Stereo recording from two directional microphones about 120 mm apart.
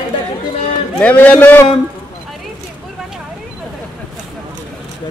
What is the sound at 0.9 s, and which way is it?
Speech, 10° left (ahead or behind).